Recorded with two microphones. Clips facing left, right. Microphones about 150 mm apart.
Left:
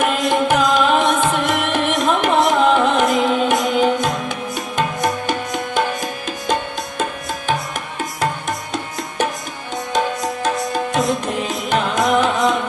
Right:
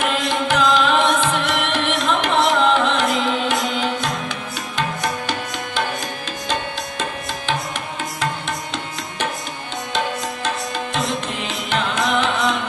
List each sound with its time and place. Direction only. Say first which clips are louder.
0.0 s music: left 4 dB; 45° left (ahead or behind)
2.1 s carnatic music: left 1 dB; 50° left (ahead or behind)
3.2 s music: left 4 dB; 15° left (ahead or behind)
3.5 s music: left 6 dB; 45° left (ahead or behind)
8.2 s music: left 4 dB; 45° left (ahead or behind)
10.9 s carnatic music: left 5 dB; 45° left (ahead or behind)